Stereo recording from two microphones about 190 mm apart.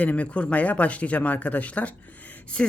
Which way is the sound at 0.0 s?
5° left (ahead or behind).